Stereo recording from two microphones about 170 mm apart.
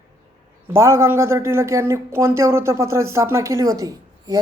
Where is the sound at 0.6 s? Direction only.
15° right (ahead or behind).